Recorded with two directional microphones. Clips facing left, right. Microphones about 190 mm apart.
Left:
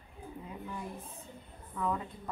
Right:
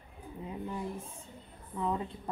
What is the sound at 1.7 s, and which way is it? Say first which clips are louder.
Speech: right 1 dB; 25° right (ahead or behind).